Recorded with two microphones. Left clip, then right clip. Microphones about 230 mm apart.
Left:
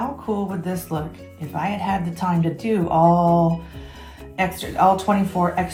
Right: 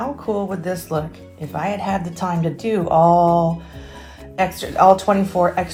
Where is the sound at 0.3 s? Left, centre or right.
Right.